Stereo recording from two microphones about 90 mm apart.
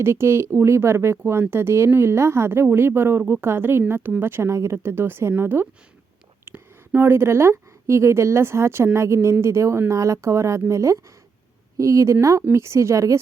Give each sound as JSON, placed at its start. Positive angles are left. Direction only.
{"t": 0.0, "sound": "a woman's voice", "side_deg": -30}